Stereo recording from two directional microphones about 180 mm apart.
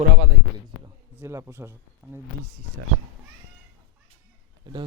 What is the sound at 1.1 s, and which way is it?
A man's voice, 15° right (ahead or behind).